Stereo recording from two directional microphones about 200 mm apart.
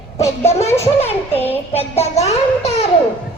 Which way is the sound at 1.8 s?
30° left (ahead or behind).